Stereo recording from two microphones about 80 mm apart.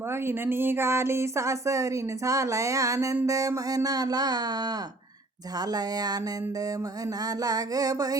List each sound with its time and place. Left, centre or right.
0.1 s speech: right
5.5 s music: right
7.2 s speech: right